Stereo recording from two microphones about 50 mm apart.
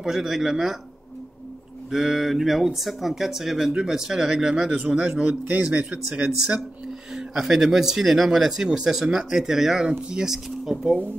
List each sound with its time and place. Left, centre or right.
0.0 s speech: centre
1.9 s speech: centre
5.2 s speech: right
7.2 s speech: centre